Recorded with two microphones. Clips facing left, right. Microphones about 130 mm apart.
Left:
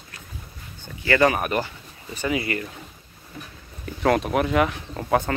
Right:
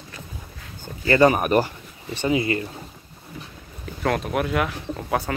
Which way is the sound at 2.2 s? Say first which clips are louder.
Right 3 dB; 25° right (ahead or behind).